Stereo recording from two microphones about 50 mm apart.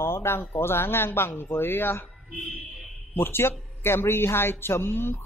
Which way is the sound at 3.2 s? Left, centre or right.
Left.